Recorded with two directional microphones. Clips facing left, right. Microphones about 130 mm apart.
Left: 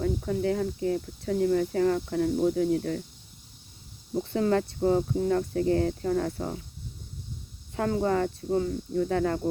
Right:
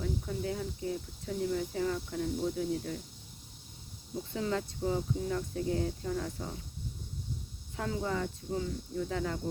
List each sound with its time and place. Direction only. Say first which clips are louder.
0.0 s speech: left 8 dB; 70° left (ahead or behind)
4.1 s speech: left 9 dB; 65° left (ahead or behind)
7.8 s speech: left 8 dB; 55° left (ahead or behind)